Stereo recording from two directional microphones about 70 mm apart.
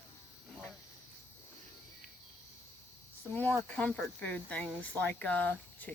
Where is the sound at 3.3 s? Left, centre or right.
Left.